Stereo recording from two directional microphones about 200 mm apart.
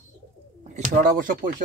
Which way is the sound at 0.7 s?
45° right (ahead or behind).